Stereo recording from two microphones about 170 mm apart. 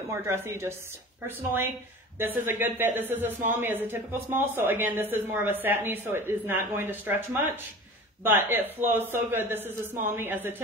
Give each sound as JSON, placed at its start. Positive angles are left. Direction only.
{"t": 0.1, "sound": "speech", "side_deg": -15}